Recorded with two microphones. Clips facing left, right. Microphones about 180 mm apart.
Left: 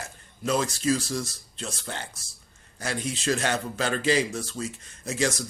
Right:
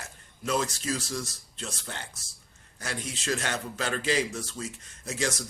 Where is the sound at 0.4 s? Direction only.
30° left (ahead or behind).